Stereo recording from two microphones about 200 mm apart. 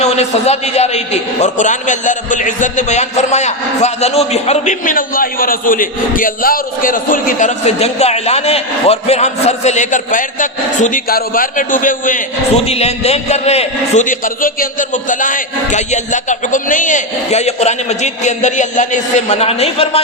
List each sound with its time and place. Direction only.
0.0 s a man's voice: 35° left (ahead or behind)
12.5 s a man's voice: 30° left (ahead or behind)